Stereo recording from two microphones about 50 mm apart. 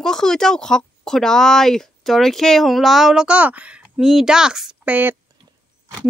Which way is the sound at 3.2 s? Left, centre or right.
Right.